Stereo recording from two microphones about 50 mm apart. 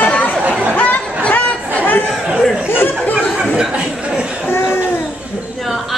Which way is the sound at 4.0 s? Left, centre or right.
Right.